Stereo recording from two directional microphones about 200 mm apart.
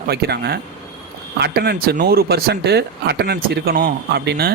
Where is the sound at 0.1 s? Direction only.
50° right (ahead or behind).